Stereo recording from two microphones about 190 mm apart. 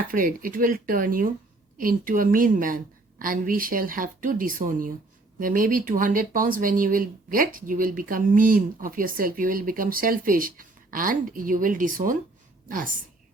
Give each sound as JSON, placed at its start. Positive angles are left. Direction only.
{"t": 0.1, "sound": "a woman's voice", "side_deg": -50}